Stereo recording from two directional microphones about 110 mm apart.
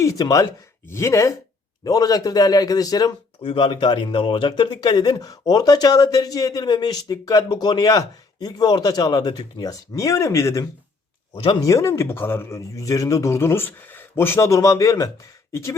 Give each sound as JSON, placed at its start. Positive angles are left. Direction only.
{"t": 0.0, "sound": "speech", "side_deg": 30}
{"t": 3.4, "sound": "speech", "side_deg": 50}